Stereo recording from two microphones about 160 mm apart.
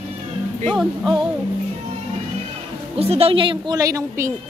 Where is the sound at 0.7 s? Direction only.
Centre (ahead or behind).